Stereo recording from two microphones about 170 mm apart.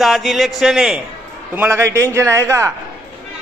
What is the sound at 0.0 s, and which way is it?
A man's voice, centre (ahead or behind).